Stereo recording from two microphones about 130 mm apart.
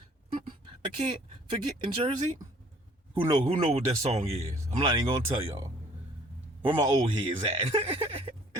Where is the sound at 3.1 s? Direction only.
50° right (ahead or behind).